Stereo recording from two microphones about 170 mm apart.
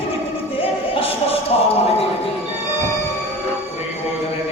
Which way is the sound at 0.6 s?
35° left (ahead or behind).